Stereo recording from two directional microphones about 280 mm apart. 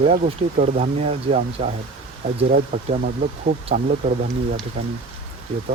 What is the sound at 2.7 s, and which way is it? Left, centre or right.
Speech, centre.